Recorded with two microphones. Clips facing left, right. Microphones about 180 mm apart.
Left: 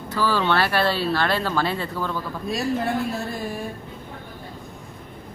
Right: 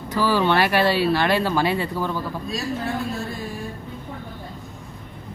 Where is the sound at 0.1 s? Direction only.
15° right (ahead or behind).